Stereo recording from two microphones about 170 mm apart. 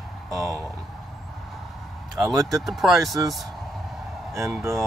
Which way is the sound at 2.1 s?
Centre (ahead or behind).